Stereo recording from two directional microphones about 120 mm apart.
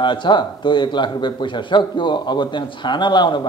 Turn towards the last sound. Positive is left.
turn(degrees=40)  # may be behind; listen again after turning